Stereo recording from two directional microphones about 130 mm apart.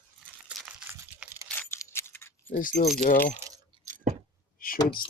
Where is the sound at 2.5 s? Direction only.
90° left.